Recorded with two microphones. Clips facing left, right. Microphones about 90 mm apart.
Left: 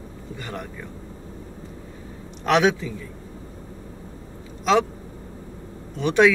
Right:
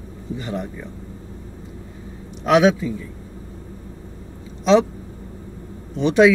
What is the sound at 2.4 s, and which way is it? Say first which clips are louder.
Speech: right 4 dB; 10° right (ahead or behind).